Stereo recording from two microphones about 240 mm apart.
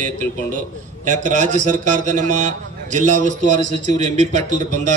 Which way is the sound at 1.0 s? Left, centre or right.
Right.